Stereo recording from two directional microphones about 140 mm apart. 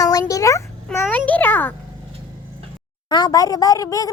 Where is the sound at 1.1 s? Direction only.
10° left (ahead or behind).